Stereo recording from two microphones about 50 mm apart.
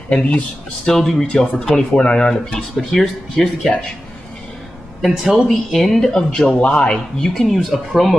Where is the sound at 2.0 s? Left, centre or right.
Left.